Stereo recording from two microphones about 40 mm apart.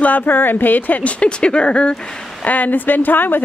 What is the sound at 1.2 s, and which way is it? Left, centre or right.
Speech, left.